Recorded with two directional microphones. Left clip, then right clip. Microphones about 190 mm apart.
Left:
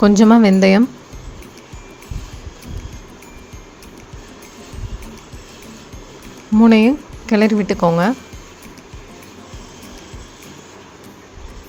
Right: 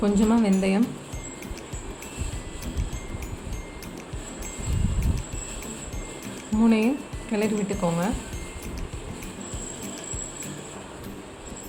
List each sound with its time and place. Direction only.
0.0 s speech: 45° left (ahead or behind)
6.6 s speech: 50° left (ahead or behind)